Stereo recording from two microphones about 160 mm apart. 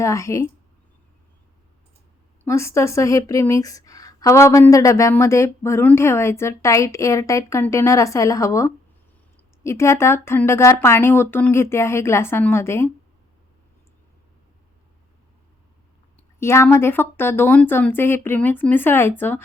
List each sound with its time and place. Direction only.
0.0 s speech: 20° left (ahead or behind)
2.4 s speech: 15° left (ahead or behind)
16.4 s speech: 15° left (ahead or behind)